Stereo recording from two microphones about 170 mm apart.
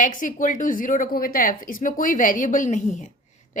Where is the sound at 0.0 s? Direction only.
50° left (ahead or behind).